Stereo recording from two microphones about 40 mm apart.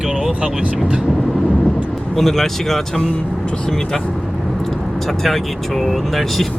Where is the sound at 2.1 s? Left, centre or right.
Centre.